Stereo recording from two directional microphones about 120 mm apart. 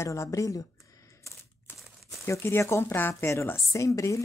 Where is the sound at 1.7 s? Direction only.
20° left (ahead or behind).